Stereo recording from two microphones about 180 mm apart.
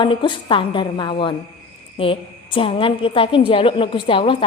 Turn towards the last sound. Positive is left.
turn(degrees=30)  # may be behind; listen again after turning